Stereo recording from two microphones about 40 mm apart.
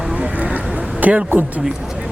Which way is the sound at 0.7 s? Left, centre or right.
Right.